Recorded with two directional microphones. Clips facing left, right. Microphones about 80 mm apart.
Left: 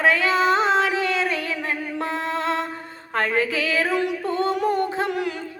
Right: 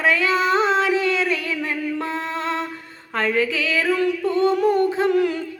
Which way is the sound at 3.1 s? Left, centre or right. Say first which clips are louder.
Right 1 dB; left.